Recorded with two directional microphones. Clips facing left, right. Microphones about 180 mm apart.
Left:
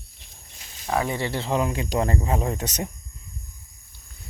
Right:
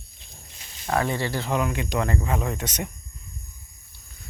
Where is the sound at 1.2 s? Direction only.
25° left (ahead or behind).